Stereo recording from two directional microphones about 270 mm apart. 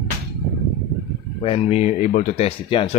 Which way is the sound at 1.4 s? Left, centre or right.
Left.